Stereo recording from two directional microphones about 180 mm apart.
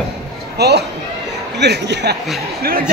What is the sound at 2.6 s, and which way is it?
Speech, 55° right (ahead or behind).